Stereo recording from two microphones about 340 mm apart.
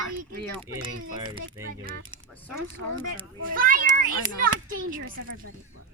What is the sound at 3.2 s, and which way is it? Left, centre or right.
Speech, right.